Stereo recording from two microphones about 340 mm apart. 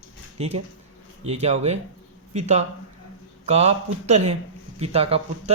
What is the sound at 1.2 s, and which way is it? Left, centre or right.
Speech, centre.